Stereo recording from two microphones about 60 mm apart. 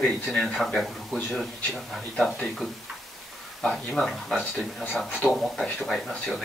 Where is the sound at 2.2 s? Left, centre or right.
Centre.